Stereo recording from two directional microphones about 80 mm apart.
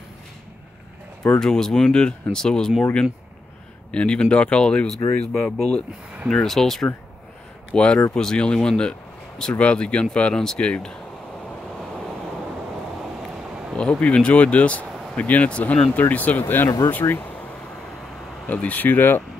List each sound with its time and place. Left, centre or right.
1.4 s speech: centre
13.7 s speech: centre
17.0 s speech: left
18.5 s speech: centre